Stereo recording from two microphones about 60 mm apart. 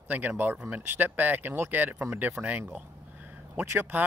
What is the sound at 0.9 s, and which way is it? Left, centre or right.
Speech, right.